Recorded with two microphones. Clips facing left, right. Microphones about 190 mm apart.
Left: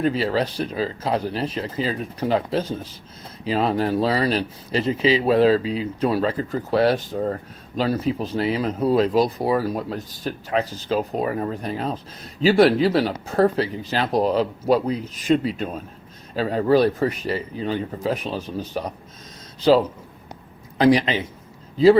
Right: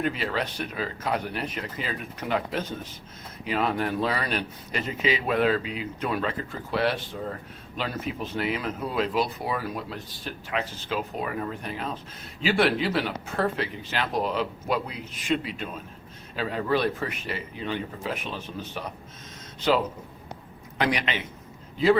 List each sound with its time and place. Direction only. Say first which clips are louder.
0.0 s speech: left 7 dB; 35° left (ahead or behind)
20.7 s speech: left 10 dB; 35° left (ahead or behind)